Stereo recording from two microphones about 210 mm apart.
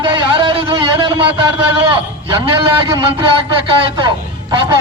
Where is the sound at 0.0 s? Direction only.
25° right (ahead or behind).